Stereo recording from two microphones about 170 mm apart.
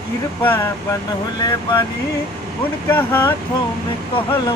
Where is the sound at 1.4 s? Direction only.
25° left (ahead or behind).